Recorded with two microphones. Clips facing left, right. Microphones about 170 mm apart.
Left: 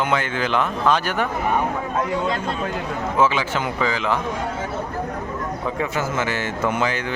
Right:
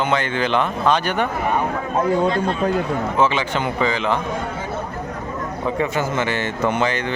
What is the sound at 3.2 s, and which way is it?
Speech, 5° left (ahead or behind).